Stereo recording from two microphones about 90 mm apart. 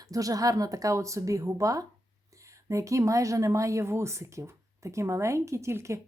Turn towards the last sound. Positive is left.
turn(degrees=-30)  # may be behind; listen again after turning